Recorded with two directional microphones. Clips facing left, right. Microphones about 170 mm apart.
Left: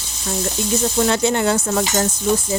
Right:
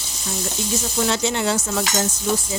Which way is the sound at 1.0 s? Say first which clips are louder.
Left 2 dB; 50° left (ahead or behind).